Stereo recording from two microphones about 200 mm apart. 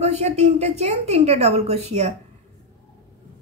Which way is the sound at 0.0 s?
30° right (ahead or behind).